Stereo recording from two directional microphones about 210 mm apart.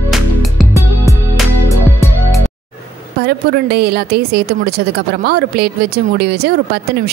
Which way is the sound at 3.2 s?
50° right (ahead or behind).